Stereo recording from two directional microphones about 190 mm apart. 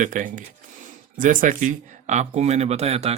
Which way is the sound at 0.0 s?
45° right (ahead or behind).